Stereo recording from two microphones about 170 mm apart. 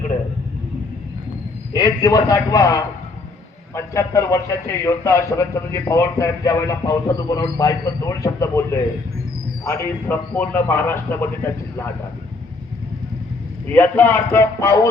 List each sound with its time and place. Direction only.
1.7 s a man's voice: 20° left (ahead or behind)
13.7 s a man's voice: 10° left (ahead or behind)